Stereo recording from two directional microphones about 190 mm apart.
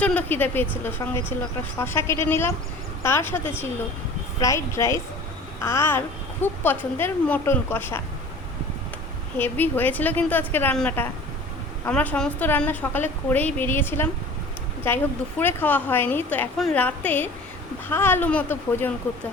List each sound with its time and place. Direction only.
0.0 s a woman's voice: 5° left (ahead or behind)
9.4 s a woman's voice: 10° left (ahead or behind)